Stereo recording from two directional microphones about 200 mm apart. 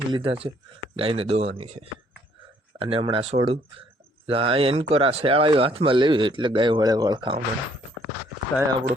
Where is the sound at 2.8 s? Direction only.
25° right (ahead or behind).